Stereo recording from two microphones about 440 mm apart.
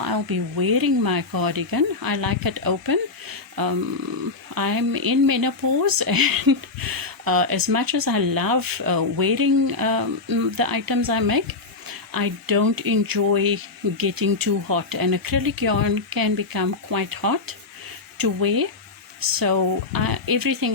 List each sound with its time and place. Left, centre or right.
0.0 s speech: right